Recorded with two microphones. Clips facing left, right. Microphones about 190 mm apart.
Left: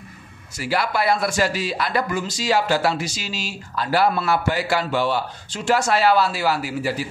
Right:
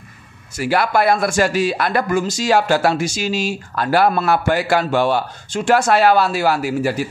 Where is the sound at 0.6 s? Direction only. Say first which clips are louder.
Right 6 dB; 55° right (ahead or behind).